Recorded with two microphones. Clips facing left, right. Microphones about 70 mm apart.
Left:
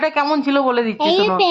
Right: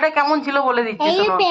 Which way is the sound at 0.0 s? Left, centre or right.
Right.